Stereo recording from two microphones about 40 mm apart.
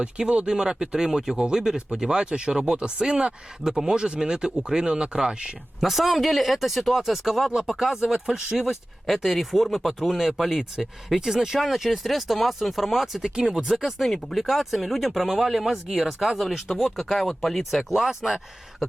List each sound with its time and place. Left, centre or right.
0.0 s speech: right
0.4 s speech: centre
5.8 s speech: centre